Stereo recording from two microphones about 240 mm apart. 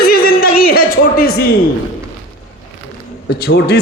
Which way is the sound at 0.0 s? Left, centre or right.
Left.